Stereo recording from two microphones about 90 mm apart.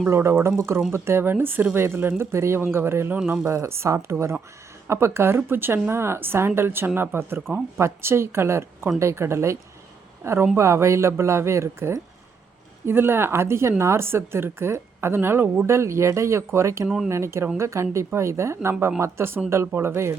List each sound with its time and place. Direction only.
0.1 s speech: 30° right (ahead or behind)